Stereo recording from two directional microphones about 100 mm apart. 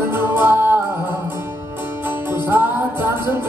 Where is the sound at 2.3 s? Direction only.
20° right (ahead or behind).